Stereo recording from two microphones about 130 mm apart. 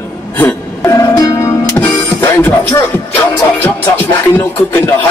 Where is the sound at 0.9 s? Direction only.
25° left (ahead or behind).